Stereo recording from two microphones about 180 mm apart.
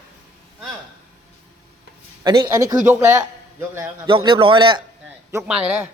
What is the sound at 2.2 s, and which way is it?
A man's voice, 20° right (ahead or behind).